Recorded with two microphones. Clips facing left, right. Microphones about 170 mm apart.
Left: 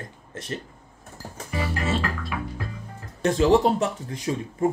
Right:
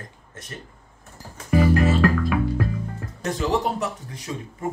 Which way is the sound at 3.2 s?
30° left (ahead or behind).